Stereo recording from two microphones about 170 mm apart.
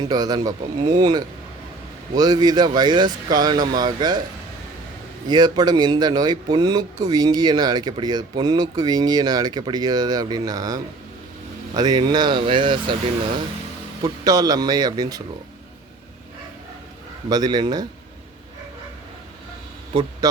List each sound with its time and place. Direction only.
0.0 s speech: 25° right (ahead or behind)
5.3 s speech: 25° right (ahead or behind)
14.0 s speech: 20° right (ahead or behind)
17.2 s speech: 25° right (ahead or behind)